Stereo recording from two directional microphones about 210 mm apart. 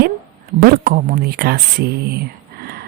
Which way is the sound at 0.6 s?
45° right (ahead or behind).